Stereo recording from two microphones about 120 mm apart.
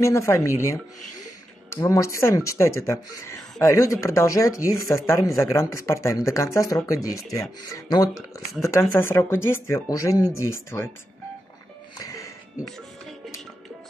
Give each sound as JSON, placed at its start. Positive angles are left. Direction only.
{"t": 0.0, "sound": "speech", "side_deg": 25}
{"t": 12.0, "sound": "music", "side_deg": 30}